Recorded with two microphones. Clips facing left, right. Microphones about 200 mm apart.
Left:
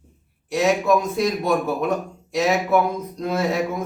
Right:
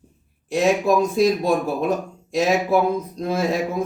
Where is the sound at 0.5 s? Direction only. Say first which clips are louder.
Right 1 dB; 30° right (ahead or behind).